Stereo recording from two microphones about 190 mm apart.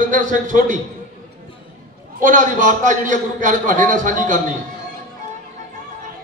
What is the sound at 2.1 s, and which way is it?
A man's voice, 40° right (ahead or behind).